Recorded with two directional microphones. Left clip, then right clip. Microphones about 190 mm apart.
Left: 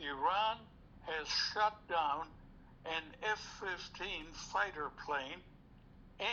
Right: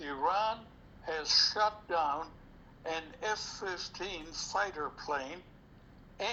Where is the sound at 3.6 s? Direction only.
25° right (ahead or behind).